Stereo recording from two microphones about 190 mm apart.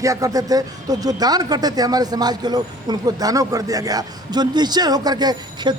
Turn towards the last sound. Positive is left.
turn(degrees=-20)  # may be behind; listen again after turning